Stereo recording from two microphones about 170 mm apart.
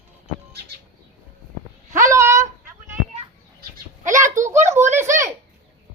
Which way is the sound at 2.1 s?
15° right (ahead or behind).